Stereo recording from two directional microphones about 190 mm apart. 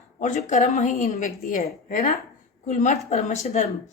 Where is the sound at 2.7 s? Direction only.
35° left (ahead or behind).